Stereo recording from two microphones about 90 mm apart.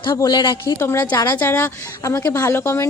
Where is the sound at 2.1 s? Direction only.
35° left (ahead or behind).